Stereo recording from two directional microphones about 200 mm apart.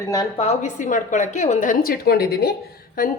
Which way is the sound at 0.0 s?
15° left (ahead or behind).